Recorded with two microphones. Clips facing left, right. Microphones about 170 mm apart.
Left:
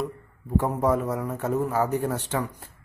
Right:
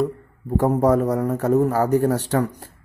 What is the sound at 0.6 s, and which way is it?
A man's voice, 40° right (ahead or behind).